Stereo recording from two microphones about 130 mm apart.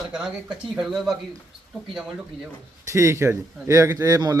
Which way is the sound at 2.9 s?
20° right (ahead or behind).